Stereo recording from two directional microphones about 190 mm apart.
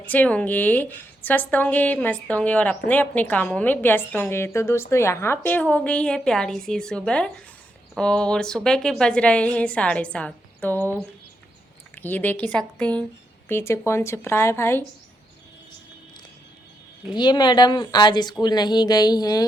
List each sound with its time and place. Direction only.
0.0 s a woman's voice: 10° left (ahead or behind)
17.2 s speech: 20° left (ahead or behind)